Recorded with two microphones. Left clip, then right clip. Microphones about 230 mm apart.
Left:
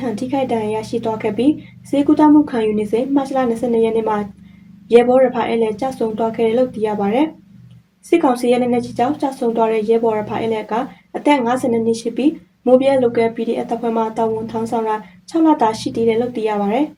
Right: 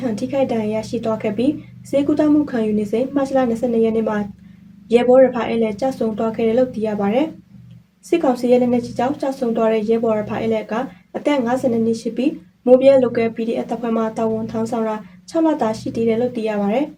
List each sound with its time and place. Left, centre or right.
0.2 s a woman's voice: centre
5.4 s a woman's voice: centre